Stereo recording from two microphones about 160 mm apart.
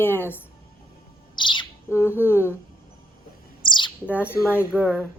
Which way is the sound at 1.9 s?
15° left (ahead or behind).